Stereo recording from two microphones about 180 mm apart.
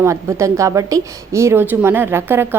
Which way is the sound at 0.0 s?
15° right (ahead or behind).